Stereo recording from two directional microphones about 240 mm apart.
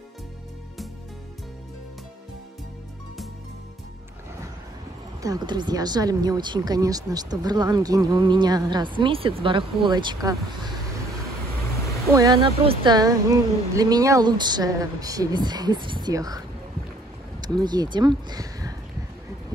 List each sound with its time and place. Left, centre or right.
5.2 s speech: centre
12.1 s speech: centre
17.6 s speech: centre